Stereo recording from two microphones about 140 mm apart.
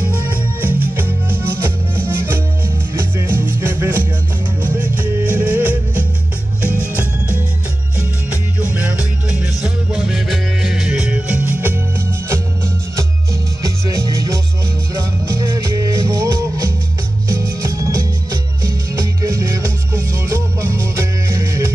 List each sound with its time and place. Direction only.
0.6 s music: 15° right (ahead or behind)
6.7 s music: 15° left (ahead or behind)
9.4 s music: 10° right (ahead or behind)
13.6 s music: 25° right (ahead or behind)